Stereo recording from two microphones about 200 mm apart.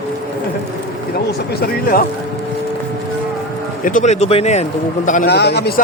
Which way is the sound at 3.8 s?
40° left (ahead or behind).